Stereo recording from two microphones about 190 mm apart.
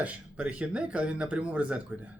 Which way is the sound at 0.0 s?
5° right (ahead or behind).